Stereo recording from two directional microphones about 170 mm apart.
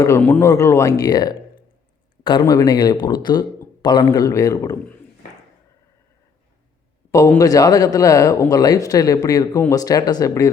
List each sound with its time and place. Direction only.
0.2 s speech: 10° left (ahead or behind)
2.4 s speech: 20° left (ahead or behind)
7.1 s speech: 15° left (ahead or behind)